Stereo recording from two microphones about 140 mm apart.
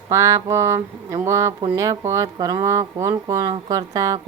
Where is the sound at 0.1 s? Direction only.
20° right (ahead or behind).